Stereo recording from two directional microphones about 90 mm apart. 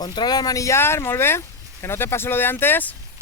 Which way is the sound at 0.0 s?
50° left (ahead or behind).